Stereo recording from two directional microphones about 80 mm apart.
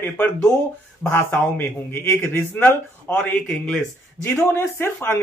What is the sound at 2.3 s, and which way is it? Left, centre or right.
Speech, centre.